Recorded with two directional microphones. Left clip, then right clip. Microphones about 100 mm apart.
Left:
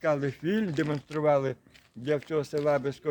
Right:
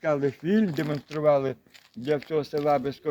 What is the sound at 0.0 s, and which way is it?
Speech, 30° left (ahead or behind).